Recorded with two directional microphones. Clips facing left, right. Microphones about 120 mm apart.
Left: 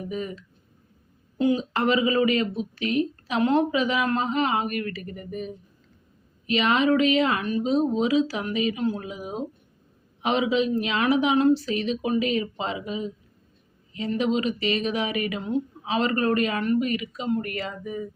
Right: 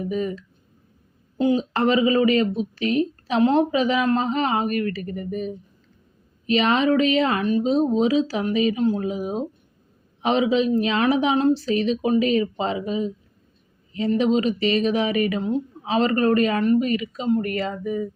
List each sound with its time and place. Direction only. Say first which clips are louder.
0.1 s speech: right 6 dB; 35° right (ahead or behind)
6.5 s speech: right 2 dB; 35° right (ahead or behind)